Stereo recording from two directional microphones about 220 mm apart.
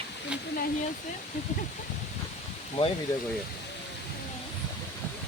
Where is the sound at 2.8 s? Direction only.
25° left (ahead or behind).